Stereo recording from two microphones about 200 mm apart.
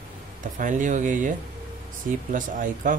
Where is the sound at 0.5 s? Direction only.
40° right (ahead or behind).